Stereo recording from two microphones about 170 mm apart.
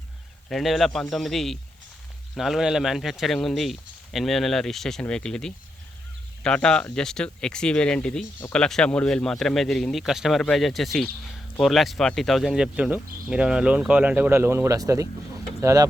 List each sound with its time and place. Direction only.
0.4 s speech: centre (ahead or behind); by 15.9 s 20° right (ahead or behind)